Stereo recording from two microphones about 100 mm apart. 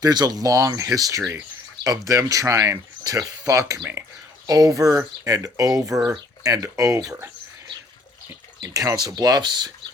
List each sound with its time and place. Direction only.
0.0 s speech: 40° right (ahead or behind)
8.3 s speech: 35° right (ahead or behind)